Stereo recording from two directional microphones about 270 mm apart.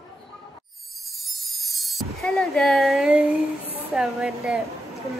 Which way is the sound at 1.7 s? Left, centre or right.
Centre.